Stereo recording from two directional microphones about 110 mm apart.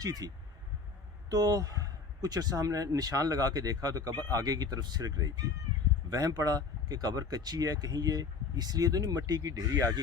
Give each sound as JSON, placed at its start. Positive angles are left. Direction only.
{"t": 0.0, "sound": "speech", "side_deg": -35}